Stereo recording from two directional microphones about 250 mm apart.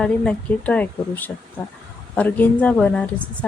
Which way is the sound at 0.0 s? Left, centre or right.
Centre.